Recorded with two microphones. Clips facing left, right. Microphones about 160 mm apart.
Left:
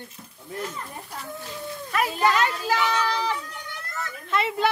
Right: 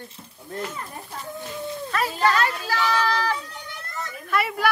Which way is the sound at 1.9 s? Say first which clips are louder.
Even; 15° left (ahead or behind).